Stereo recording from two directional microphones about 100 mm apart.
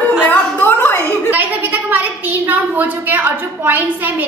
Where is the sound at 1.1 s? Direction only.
15° right (ahead or behind).